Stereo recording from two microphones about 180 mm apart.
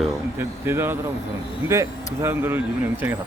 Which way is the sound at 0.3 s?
15° right (ahead or behind).